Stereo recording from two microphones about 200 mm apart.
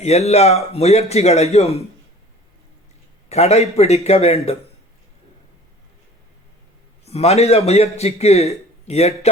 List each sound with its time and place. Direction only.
0.0 s a man's voice: 35° left (ahead or behind)
3.2 s a man's voice: 30° left (ahead or behind)
7.0 s a man's voice: 30° left (ahead or behind)